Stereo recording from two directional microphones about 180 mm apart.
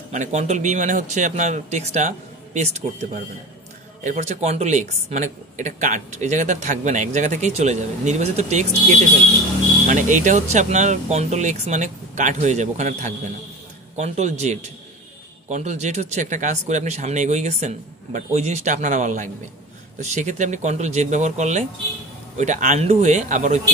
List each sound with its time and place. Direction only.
0.1 s speech: 40° right (ahead or behind)